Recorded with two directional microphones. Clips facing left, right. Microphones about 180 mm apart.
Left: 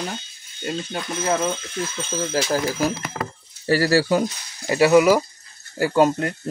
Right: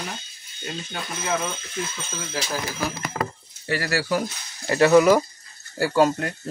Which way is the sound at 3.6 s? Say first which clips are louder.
Left 7 dB; 30° left (ahead or behind).